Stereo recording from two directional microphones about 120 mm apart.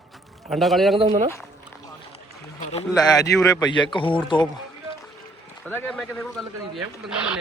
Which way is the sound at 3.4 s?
35° left (ahead or behind).